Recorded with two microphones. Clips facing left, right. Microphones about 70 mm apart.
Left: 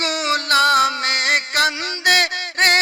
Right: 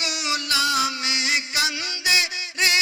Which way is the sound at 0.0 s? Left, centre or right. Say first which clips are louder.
Left 7 dB; left.